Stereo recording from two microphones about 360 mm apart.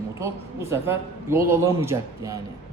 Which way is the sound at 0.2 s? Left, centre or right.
Centre.